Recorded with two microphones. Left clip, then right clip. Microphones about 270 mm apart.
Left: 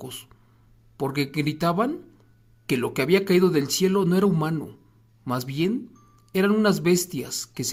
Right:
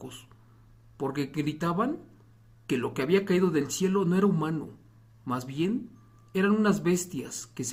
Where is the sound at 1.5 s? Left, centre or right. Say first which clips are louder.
Left 5 dB; left.